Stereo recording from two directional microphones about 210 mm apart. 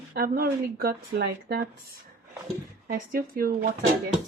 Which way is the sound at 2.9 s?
45° right (ahead or behind).